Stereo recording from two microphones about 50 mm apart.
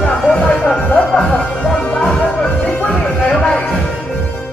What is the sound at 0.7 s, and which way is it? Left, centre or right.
Music, left.